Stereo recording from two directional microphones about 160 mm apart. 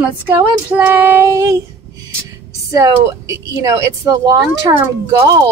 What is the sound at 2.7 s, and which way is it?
A woman's voice, 20° right (ahead or behind).